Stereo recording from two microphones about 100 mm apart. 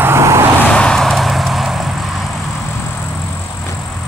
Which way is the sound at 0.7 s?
10° left (ahead or behind).